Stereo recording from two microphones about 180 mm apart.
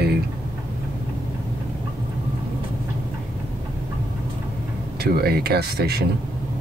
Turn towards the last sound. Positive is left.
turn(degrees=-60)  # may be behind; listen again after turning